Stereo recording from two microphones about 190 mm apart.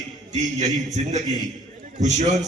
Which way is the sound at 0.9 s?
40° right (ahead or behind).